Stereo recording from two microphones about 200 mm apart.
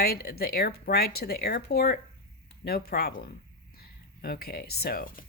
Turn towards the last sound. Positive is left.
turn(degrees=45)  # may be behind; listen again after turning